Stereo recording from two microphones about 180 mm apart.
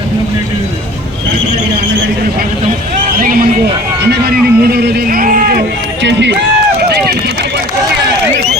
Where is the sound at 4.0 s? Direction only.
65° right (ahead or behind).